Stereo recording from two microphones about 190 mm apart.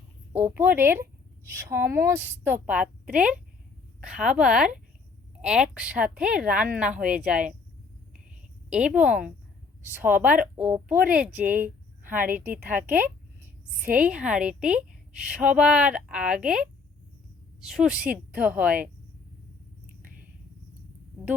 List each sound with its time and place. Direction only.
0.3 s a woman's voice: 10° right (ahead or behind)
8.7 s a woman's voice: 5° right (ahead or behind)
12.1 s a woman's voice: 45° right (ahead or behind)
12.8 s a woman's voice: 10° right (ahead or behind)
20.0 s whispering: 45° right (ahead or behind)